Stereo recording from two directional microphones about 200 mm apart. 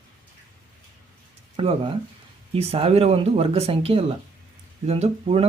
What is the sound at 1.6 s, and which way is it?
Speech, 25° right (ahead or behind).